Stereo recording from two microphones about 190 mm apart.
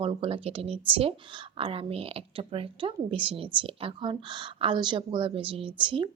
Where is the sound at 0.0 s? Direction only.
30° right (ahead or behind).